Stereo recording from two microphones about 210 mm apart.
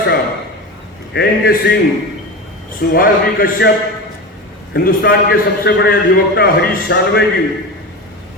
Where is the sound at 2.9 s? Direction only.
45° left (ahead or behind).